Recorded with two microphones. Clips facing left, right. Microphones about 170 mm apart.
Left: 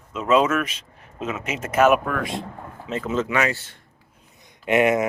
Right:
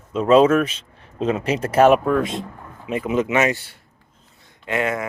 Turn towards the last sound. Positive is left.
turn(degrees=20)  # may be behind; listen again after turning